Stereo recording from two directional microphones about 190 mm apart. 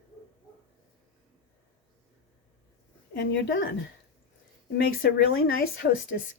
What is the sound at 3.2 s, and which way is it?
Speech, 55° left (ahead or behind).